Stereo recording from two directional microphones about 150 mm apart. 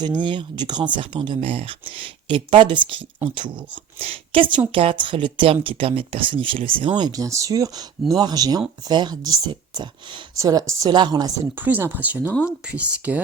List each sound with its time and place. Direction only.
0.0 s speech: 30° right (ahead or behind)
11.6 s speech: 10° right (ahead or behind)